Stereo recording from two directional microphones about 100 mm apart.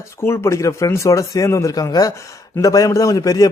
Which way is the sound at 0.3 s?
30° left (ahead or behind).